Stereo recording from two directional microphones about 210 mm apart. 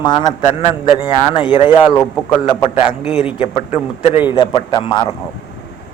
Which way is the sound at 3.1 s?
25° left (ahead or behind).